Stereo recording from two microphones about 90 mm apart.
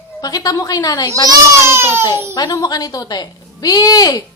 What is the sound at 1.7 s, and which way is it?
Speech, 25° right (ahead or behind).